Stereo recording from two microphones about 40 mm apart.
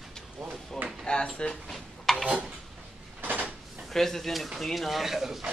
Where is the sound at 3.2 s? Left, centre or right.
Right.